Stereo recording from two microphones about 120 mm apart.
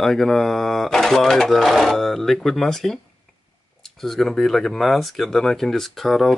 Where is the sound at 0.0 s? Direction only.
5° left (ahead or behind).